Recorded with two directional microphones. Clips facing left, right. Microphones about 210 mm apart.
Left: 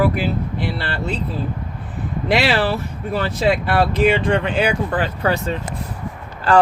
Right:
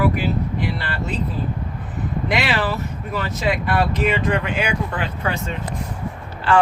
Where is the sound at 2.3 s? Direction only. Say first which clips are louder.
Left 5 dB; 30° left (ahead or behind).